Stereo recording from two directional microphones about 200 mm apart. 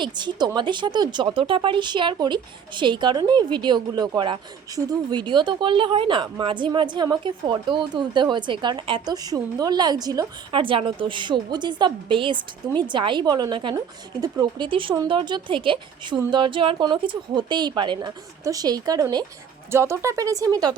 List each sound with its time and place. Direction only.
0.0 s speech: 20° right (ahead or behind)